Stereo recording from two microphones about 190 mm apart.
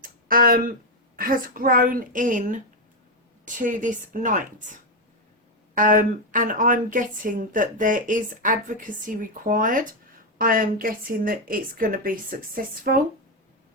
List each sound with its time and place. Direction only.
0.0 s a woman's voice: 50° right (ahead or behind)
5.7 s a woman's voice: 45° right (ahead or behind)